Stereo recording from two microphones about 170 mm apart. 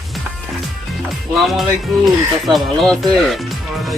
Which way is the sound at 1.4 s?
Centre (ahead or behind).